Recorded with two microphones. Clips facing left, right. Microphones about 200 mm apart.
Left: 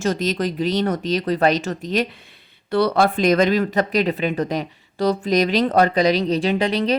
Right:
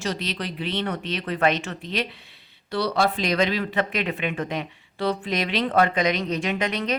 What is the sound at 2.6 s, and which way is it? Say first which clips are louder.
Speech: left 6 dB; 55° left (ahead or behind).